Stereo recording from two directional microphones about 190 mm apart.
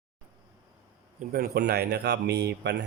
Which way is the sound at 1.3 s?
55° right (ahead or behind).